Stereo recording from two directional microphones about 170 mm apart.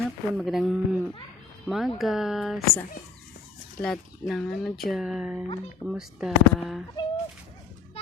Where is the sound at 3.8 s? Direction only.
5° left (ahead or behind).